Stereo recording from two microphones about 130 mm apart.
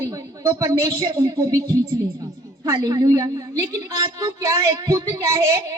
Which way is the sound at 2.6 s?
25° right (ahead or behind).